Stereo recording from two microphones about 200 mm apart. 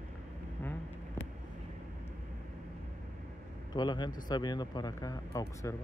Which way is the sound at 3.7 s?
20° left (ahead or behind).